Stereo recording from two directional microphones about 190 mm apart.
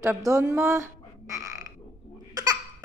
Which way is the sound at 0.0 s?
15° right (ahead or behind).